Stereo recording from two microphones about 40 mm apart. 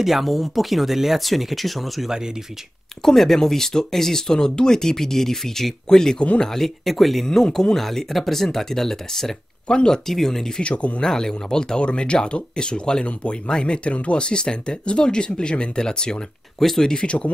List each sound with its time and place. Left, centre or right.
0.0 s speech: centre
2.0 s speech: centre
3.0 s speech: centre
9.7 s speech: left
10.0 s speech: centre
10.6 s speech: left
11.1 s speech: centre
11.8 s speech: left
16.5 s speech: centre
16.9 s speech: left